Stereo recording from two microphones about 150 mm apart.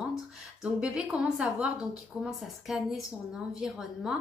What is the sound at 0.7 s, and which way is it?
Speech, 5° right (ahead or behind).